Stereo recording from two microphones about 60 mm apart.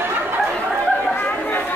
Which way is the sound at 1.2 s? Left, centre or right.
Left.